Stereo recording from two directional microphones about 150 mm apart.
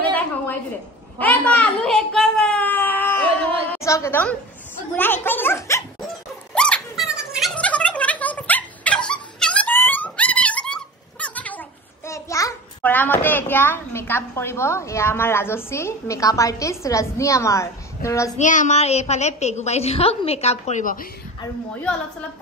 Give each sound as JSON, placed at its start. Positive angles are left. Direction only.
{"t": 1.2, "sound": "a sound", "side_deg": 10}
{"t": 3.7, "sound": "a woman's voice", "side_deg": 20}
{"t": 6.5, "sound": "a sound", "side_deg": 5}
{"t": 12.1, "sound": "a child's voice", "side_deg": 20}
{"t": 18.4, "sound": "a woman's voice", "side_deg": 55}
{"t": 20.8, "sound": "speech", "side_deg": 70}